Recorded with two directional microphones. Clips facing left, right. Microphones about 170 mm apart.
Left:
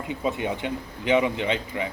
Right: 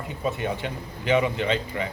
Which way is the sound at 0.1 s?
15° left (ahead or behind).